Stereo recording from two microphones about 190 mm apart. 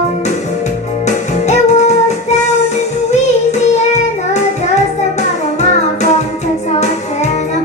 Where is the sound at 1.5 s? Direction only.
35° left (ahead or behind).